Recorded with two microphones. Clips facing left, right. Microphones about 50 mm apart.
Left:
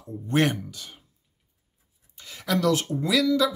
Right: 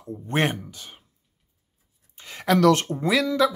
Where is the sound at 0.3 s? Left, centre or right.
Right.